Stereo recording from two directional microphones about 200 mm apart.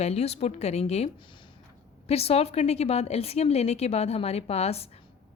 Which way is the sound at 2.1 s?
30° left (ahead or behind).